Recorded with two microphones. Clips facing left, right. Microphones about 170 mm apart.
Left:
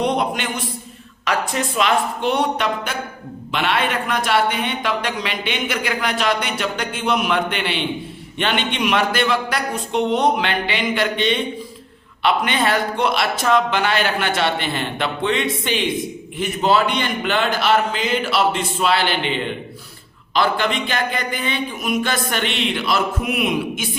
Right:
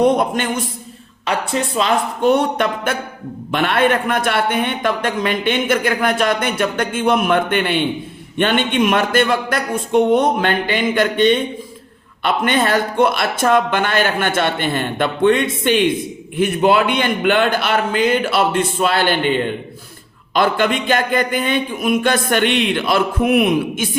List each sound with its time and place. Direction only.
0.0 s a man's voice: 45° right (ahead or behind)
1.2 s speech: 30° right (ahead or behind)
2.2 s a man's voice: 50° right (ahead or behind)